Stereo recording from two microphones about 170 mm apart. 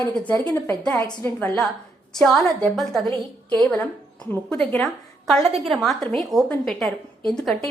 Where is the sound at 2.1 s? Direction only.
5° left (ahead or behind).